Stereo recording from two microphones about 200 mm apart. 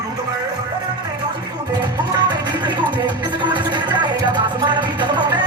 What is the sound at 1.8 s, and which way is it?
Music, 20° right (ahead or behind).